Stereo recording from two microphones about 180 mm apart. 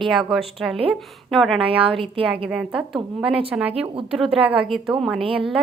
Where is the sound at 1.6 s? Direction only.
30° right (ahead or behind).